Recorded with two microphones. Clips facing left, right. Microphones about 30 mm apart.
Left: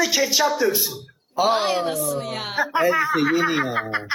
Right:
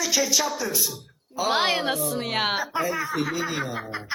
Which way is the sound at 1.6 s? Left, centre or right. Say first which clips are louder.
Left 1 dB; right.